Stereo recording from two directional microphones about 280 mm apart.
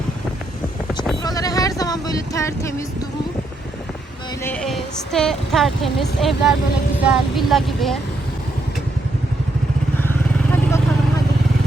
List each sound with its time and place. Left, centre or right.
1.2 s music: centre
4.4 s a woman's voice: centre
10.0 s vehicle: centre